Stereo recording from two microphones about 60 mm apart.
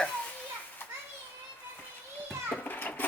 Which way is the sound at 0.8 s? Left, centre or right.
Left.